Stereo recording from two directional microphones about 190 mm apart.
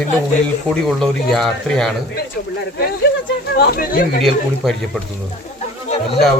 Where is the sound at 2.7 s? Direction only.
55° left (ahead or behind).